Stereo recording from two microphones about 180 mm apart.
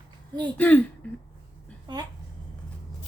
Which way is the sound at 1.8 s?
20° right (ahead or behind).